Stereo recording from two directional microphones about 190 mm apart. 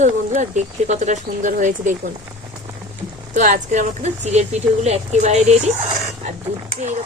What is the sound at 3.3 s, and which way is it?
Speech, 40° right (ahead or behind).